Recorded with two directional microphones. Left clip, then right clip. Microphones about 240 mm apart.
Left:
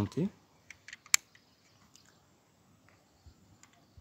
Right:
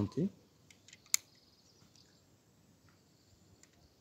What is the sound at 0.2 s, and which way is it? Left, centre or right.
Speech, left.